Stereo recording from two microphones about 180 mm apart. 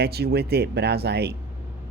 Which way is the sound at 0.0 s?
60° right (ahead or behind).